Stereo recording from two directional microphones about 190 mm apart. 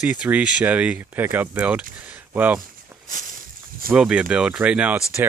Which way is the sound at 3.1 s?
45° right (ahead or behind).